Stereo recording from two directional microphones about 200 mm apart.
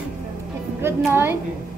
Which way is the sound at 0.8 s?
10° right (ahead or behind).